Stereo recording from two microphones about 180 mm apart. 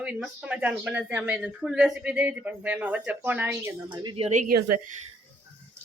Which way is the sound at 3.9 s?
25° right (ahead or behind).